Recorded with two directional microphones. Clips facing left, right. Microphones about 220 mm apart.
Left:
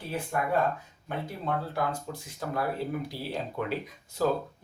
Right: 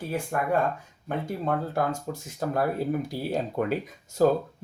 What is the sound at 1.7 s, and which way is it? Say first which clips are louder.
Speech: right 4 dB; 45° right (ahead or behind).